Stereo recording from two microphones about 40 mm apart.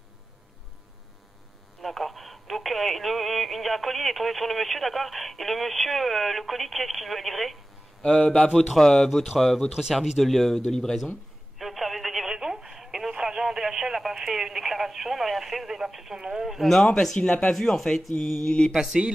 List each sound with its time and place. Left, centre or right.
1.8 s speech: centre
8.5 s speech: centre
9.7 s speech: centre
10.0 s speech: centre
11.5 s telephone: centre
13.1 s speech: centre
16.7 s speech: centre
17.2 s speech: left
17.5 s speech: centre
18.9 s speech: right